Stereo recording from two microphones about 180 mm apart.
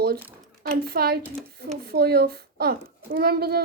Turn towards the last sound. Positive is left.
turn(degrees=-60)  # may be behind; listen again after turning